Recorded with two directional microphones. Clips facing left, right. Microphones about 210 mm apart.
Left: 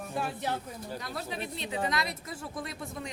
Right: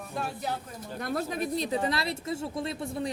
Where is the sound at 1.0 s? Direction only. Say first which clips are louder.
Right 10 dB; 50° right (ahead or behind).